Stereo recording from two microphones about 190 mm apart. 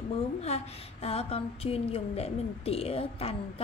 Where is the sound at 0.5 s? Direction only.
35° left (ahead or behind).